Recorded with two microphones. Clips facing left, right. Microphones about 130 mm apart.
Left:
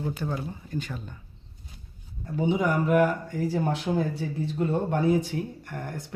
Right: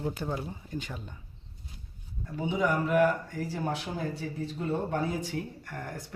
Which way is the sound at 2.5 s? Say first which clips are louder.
Left 3 dB; 50° left (ahead or behind).